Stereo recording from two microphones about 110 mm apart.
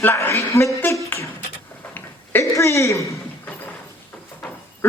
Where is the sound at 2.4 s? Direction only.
30° left (ahead or behind).